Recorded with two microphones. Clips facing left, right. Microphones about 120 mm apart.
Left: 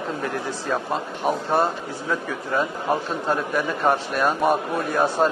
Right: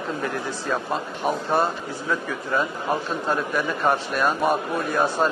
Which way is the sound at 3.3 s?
40° left (ahead or behind).